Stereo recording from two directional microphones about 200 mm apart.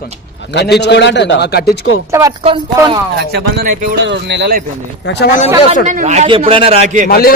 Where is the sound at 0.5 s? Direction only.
60° left (ahead or behind).